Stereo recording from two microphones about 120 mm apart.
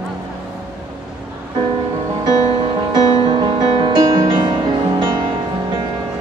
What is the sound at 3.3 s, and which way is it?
Music, 35° right (ahead or behind).